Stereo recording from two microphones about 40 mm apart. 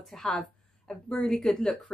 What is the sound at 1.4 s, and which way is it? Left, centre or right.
Speech, centre.